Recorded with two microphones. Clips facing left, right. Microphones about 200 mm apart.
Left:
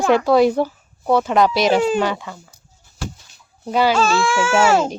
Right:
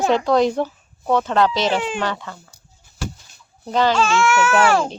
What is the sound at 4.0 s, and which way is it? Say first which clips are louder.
Speech: even; 35° left (ahead or behind).